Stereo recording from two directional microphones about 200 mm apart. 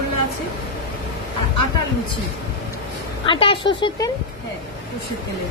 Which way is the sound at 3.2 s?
25° left (ahead or behind).